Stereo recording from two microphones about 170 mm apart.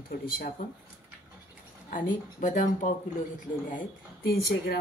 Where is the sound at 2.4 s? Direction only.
45° left (ahead or behind).